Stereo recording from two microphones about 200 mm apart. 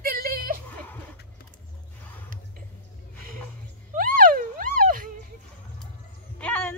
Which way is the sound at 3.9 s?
45° right (ahead or behind).